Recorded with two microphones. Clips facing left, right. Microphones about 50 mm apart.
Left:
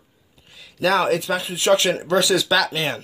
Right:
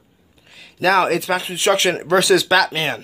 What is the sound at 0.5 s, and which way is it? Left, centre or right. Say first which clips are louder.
Speech: right 3 dB; right.